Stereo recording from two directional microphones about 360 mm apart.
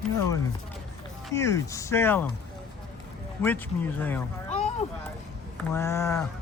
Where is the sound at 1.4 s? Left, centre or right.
Centre.